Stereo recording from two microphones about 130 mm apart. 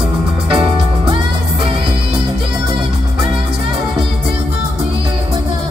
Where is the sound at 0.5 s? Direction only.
45° right (ahead or behind).